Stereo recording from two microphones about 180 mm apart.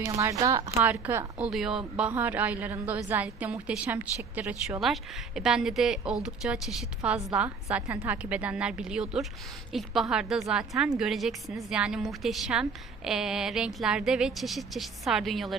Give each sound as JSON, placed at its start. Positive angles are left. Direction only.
{"t": 0.0, "sound": "a woman's voice", "side_deg": -15}